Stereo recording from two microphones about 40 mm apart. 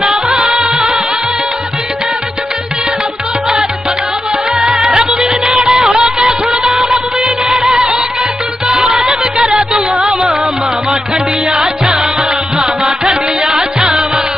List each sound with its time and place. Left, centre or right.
0.0 s music: centre
4.6 s music: centre
8.7 s music: centre
11.8 s music: centre